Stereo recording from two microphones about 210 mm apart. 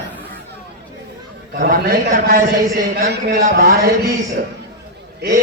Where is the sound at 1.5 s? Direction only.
45° right (ahead or behind).